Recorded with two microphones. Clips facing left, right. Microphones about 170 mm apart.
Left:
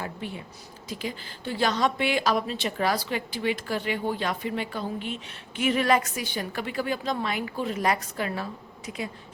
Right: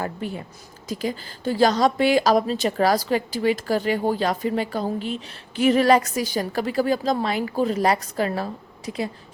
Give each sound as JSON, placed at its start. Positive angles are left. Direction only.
{"t": 0.0, "sound": "a woman's voice", "side_deg": -40}